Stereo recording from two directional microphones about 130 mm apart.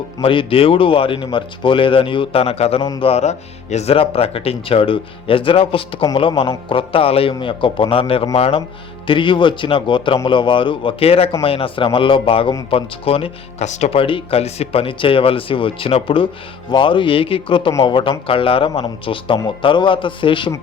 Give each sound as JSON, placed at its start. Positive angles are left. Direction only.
{"t": 0.2, "sound": "speech", "side_deg": 45}
{"t": 13.7, "sound": "speech", "side_deg": 60}